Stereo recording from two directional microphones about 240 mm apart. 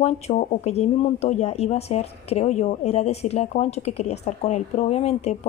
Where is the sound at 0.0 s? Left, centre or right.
Left.